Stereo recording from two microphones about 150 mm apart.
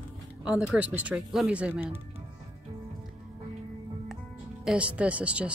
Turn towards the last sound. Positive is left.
turn(degrees=-10)  # may be behind; listen again after turning